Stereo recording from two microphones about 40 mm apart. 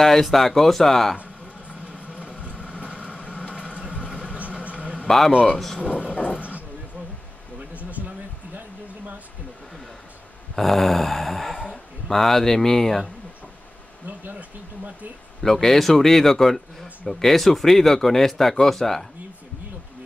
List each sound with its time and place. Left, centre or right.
0.0 s speech: centre
1.7 s music: right
3.2 s a sound: left
4.0 s vehicle: right
5.8 s speech: left
10.5 s a sound: centre
11.7 s speech: centre
15.4 s speech: centre